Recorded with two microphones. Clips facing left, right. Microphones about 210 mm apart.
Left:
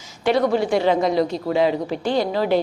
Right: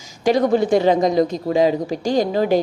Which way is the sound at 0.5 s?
45° right (ahead or behind).